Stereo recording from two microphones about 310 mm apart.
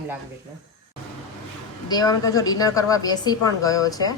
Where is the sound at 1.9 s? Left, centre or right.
Centre.